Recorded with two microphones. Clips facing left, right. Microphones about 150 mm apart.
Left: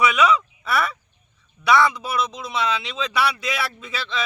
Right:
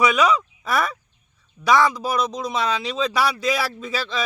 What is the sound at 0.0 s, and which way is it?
Speech, 35° right (ahead or behind).